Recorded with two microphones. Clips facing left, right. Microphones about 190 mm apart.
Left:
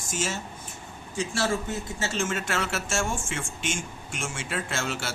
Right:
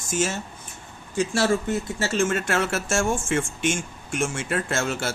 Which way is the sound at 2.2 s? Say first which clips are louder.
Right 6 dB; 55° right (ahead or behind).